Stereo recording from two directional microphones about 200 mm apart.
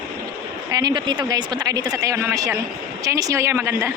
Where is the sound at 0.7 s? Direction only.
20° right (ahead or behind).